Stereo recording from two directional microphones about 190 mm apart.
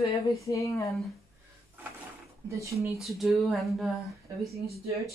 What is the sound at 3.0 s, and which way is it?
Speech, centre (ahead or behind).